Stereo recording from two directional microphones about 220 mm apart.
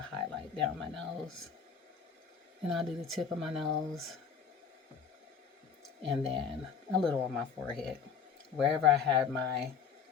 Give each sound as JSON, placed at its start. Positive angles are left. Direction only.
{"t": 0.1, "sound": "speech", "side_deg": 5}
{"t": 2.6, "sound": "speech", "side_deg": 0}
{"t": 6.0, "sound": "speech", "side_deg": -25}
{"t": 6.9, "sound": "speech", "side_deg": 5}